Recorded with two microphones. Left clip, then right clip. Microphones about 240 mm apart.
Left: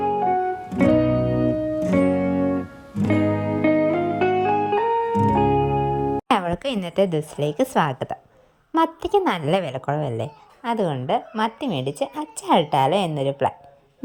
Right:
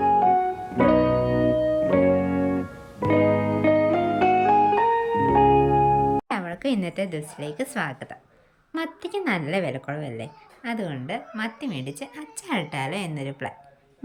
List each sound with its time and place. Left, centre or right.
0.0 s music: centre
6.3 s a woman's voice: left